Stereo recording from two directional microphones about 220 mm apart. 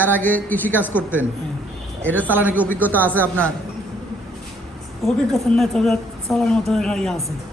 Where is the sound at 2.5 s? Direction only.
10° left (ahead or behind).